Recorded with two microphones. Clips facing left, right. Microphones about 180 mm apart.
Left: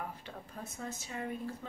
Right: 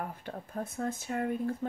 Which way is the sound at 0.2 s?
55° right (ahead or behind).